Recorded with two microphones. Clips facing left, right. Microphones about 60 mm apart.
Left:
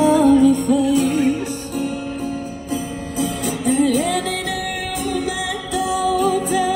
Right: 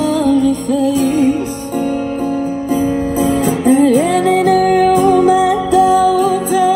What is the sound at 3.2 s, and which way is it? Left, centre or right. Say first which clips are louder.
Music: right 7 dB; centre.